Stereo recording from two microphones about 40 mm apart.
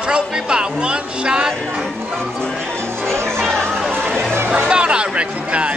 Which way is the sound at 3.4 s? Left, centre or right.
Centre.